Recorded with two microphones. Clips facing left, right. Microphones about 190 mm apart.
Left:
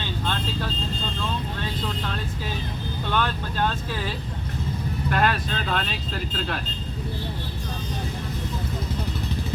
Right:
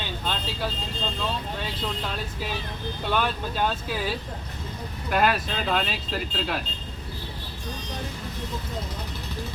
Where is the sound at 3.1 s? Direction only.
10° right (ahead or behind).